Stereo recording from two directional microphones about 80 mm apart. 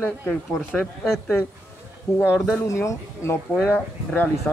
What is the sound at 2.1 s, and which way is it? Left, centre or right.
Speech, left.